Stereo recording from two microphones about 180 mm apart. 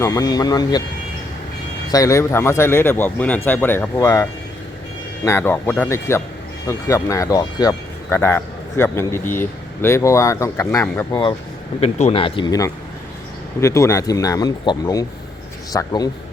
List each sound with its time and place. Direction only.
0.0 s speech: 20° left (ahead or behind)
1.9 s speech: 20° left (ahead or behind)
11.8 s speech: 35° left (ahead or behind); by 16.0 s 20° left (ahead or behind)